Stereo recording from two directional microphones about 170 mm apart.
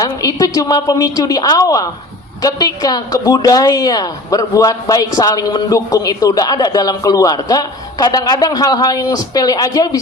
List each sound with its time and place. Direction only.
0.0 s a woman's voice: 20° left (ahead or behind)